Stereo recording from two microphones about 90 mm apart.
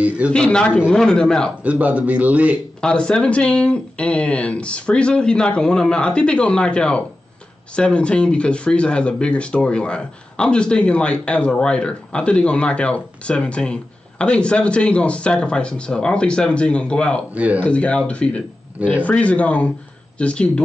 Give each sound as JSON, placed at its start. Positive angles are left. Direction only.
{"t": 0.3, "sound": "speech", "side_deg": 10}
{"t": 1.6, "sound": "a man's voice", "side_deg": -15}
{"t": 2.8, "sound": "speech", "side_deg": 10}
{"t": 17.4, "sound": "a man's voice", "side_deg": -15}
{"t": 17.6, "sound": "speech", "side_deg": 10}